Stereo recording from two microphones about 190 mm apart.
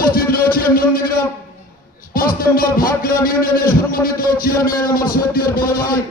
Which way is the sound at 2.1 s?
50° left (ahead or behind).